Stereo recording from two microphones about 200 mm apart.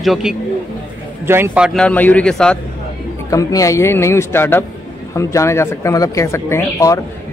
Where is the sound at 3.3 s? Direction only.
15° left (ahead or behind).